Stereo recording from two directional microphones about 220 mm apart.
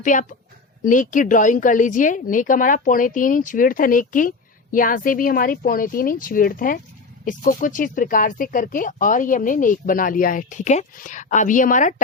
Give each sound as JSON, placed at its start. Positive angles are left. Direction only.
{"t": 0.0, "sound": "a woman's voice", "side_deg": 35}